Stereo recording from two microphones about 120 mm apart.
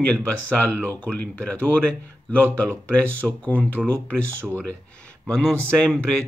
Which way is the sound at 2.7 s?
15° right (ahead or behind).